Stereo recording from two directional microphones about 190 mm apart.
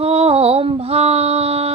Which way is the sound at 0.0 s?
30° right (ahead or behind).